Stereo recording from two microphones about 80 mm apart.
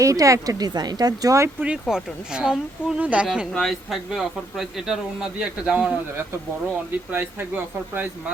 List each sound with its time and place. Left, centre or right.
0.0 s speech: right
1.6 s speech: centre
3.5 s a man's voice: centre
7.1 s speech: right